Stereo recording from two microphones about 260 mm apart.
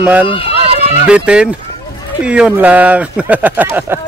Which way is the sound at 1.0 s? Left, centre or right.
Centre.